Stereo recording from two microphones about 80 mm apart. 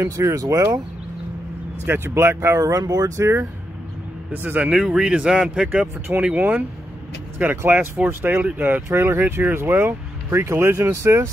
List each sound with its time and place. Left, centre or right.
0.3 s speech: right
1.9 s speech: right
2.6 s speech: right
4.3 s speech: right
4.6 s speech: centre; by 11.2 s right